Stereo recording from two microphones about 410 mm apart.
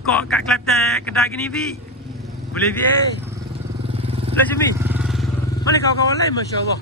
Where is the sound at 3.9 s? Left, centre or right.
Centre.